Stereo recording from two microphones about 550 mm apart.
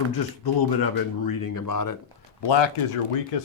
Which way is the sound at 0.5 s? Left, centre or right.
Left.